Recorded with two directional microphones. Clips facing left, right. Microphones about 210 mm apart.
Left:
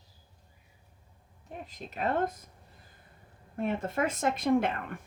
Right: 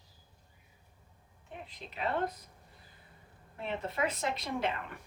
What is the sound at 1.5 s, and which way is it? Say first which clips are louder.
Speech: left 4 dB; 45° left (ahead or behind).